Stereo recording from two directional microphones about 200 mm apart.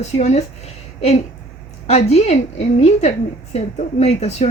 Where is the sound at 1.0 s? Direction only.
30° left (ahead or behind).